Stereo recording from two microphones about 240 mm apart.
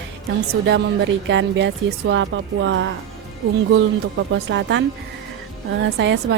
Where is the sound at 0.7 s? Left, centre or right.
Right.